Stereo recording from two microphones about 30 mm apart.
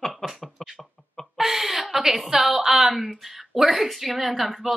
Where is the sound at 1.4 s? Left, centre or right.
Centre.